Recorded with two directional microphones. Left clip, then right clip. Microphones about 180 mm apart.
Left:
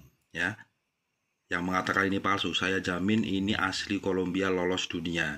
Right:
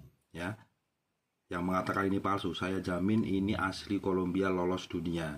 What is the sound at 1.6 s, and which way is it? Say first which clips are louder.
Speech: left 4 dB; 20° left (ahead or behind).